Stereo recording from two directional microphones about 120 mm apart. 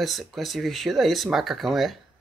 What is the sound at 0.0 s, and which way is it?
Speech, centre (ahead or behind).